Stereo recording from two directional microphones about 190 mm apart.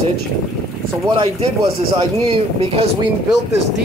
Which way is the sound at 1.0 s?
30° right (ahead or behind).